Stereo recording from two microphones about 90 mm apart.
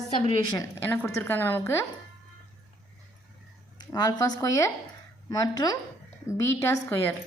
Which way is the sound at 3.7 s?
50° left (ahead or behind).